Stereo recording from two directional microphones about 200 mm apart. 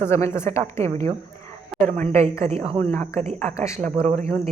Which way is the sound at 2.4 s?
30° right (ahead or behind).